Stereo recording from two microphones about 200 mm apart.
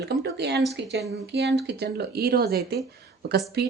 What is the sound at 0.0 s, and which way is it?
Speech, 55° right (ahead or behind).